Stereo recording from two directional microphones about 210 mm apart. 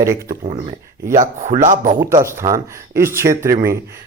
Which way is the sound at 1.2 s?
35° right (ahead or behind).